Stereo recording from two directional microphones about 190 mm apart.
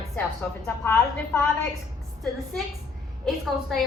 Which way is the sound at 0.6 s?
15° left (ahead or behind).